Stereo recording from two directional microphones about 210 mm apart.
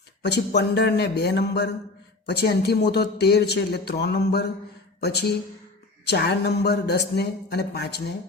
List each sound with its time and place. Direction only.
0.2 s speech: 50° left (ahead or behind)